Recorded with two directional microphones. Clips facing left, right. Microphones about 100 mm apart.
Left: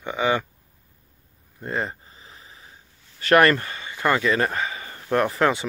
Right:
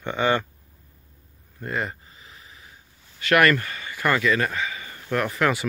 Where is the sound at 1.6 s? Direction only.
30° left (ahead or behind).